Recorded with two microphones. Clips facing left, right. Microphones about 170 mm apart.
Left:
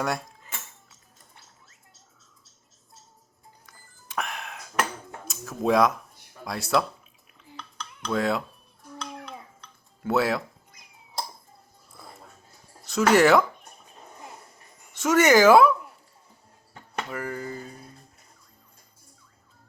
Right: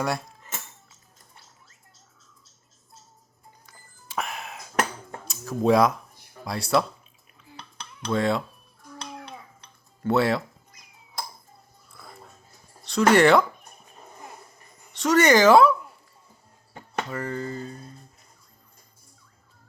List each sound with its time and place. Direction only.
4.1 s music: centre (ahead or behind)
5.3 s speech: centre (ahead or behind)
8.1 s speech: centre (ahead or behind)
10.0 s speech: centre (ahead or behind)
12.8 s speech: 5° left (ahead or behind)
15.0 s speech: 5° left (ahead or behind)
17.1 s speech: 10° left (ahead or behind)